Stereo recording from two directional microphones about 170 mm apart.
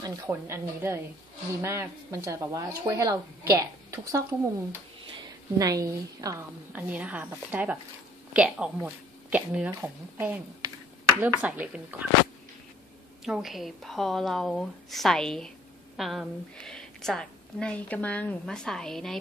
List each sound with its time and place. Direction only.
0.0 s speech: 15° right (ahead or behind)
5.6 s speech: 20° right (ahead or behind)
13.2 s a woman's voice: centre (ahead or behind)